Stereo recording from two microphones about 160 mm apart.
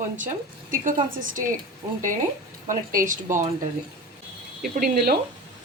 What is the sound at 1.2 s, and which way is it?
Speech, 55° right (ahead or behind).